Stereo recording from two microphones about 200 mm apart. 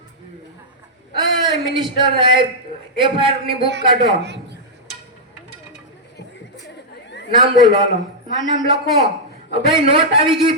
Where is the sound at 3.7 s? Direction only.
60° right (ahead or behind).